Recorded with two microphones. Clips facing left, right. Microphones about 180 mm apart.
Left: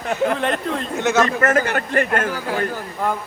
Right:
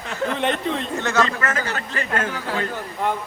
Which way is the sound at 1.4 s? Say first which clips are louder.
Left 7 dB; 50° left (ahead or behind).